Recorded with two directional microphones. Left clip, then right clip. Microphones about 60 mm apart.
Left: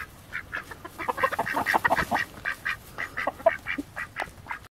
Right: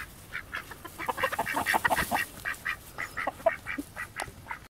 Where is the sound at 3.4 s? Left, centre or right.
Left.